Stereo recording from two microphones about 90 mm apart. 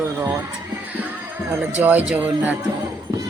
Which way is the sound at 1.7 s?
20° right (ahead or behind).